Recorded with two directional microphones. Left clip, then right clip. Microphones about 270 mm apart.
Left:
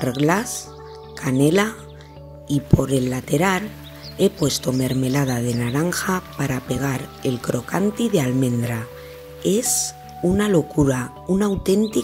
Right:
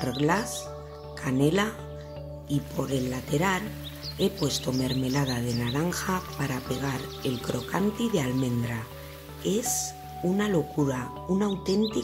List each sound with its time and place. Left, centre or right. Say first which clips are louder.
0.0 s speech: left 6 dB; centre